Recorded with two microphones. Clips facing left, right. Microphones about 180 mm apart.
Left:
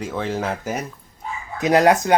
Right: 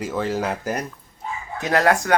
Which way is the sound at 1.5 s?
20° left (ahead or behind).